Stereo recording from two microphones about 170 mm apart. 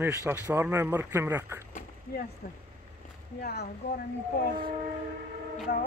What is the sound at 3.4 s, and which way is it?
Speech, 70° left (ahead or behind).